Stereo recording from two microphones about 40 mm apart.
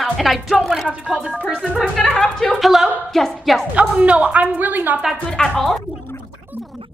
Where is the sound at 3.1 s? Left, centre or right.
Centre.